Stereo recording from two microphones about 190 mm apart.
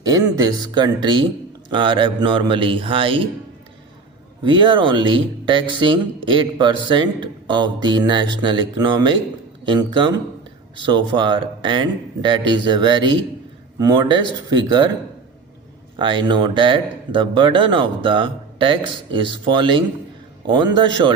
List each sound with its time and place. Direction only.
0.0 s speech: 20° right (ahead or behind)
4.4 s speech: 25° right (ahead or behind)
16.0 s speech: 25° right (ahead or behind)